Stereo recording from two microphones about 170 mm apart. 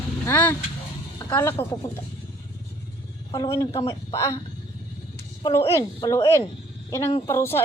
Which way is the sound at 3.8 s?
20° left (ahead or behind).